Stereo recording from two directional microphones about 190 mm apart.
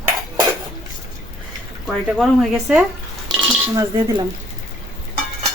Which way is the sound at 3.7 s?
20° right (ahead or behind).